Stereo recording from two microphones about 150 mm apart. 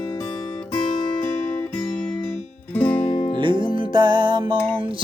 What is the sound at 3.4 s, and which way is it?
Music, 35° right (ahead or behind).